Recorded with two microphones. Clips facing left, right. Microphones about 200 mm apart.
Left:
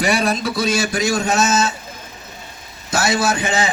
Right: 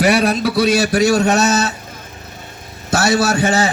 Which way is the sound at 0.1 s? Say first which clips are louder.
Right 4 dB; 65° right (ahead or behind).